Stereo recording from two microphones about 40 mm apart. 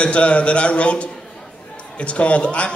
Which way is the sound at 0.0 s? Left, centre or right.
Left.